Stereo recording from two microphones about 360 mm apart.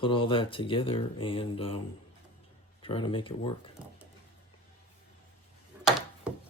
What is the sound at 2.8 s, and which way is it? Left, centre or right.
Speech, centre.